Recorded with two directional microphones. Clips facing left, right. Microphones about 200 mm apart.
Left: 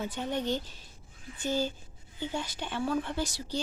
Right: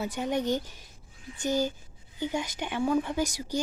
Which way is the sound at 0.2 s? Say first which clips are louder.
Right 4 dB; 15° right (ahead or behind).